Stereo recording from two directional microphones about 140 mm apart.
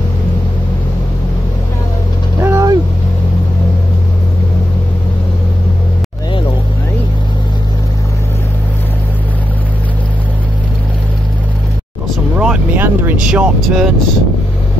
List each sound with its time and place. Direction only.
2.4 s vehicle: 25° right (ahead or behind)
12.4 s vehicle: 10° right (ahead or behind)
13.3 s speech: 5° right (ahead or behind)